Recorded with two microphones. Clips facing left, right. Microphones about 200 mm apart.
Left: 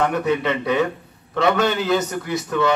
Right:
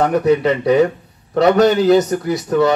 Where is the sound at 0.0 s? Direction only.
40° right (ahead or behind).